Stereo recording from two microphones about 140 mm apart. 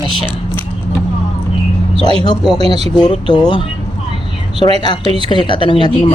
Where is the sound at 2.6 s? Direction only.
45° right (ahead or behind).